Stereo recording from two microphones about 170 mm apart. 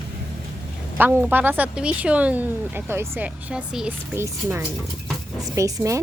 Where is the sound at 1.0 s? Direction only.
10° right (ahead or behind).